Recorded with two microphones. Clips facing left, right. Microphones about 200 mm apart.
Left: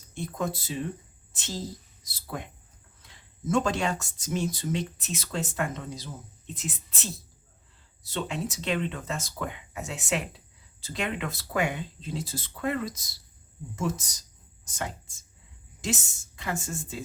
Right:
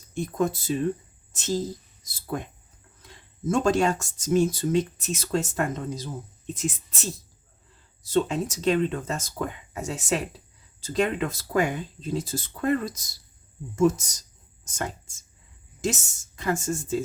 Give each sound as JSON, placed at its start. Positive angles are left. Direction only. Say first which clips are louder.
{"t": 0.1, "sound": "a woman's voice", "louder": "right 6 dB", "side_deg": -45}
{"t": 8.1, "sound": "speech", "louder": "right 8 dB", "side_deg": -40}
{"t": 14.6, "sound": "a sound", "louder": "right 3 dB", "side_deg": -45}
{"t": 15.8, "sound": "speech", "louder": "right 4 dB", "side_deg": -45}